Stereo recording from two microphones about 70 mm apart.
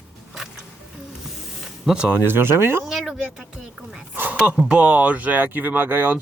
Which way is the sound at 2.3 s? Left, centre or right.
Right.